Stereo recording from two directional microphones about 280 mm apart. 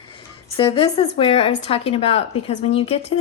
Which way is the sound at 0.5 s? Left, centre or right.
Centre.